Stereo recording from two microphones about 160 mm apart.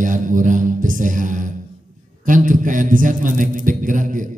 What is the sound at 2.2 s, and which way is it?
Music, 55° right (ahead or behind).